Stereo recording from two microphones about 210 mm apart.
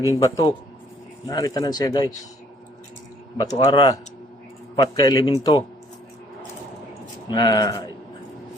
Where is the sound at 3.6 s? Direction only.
20° left (ahead or behind).